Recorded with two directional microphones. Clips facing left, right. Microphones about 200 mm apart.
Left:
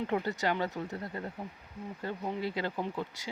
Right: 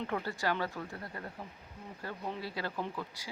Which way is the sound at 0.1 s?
20° left (ahead or behind).